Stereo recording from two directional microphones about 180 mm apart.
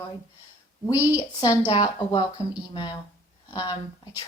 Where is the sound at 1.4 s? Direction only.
20° left (ahead or behind).